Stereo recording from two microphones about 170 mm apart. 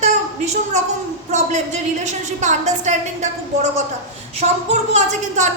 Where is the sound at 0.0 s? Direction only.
45° right (ahead or behind).